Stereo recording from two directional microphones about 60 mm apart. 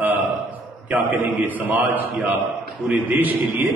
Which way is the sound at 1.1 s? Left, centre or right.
Right.